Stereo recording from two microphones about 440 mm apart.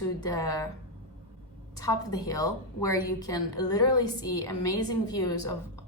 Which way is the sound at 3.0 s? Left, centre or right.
Left.